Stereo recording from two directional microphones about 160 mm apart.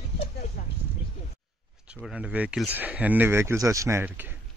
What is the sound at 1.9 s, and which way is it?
Speech, 5° right (ahead or behind).